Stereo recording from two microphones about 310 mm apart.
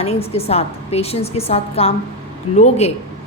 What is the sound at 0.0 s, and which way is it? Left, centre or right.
A woman's voice, centre.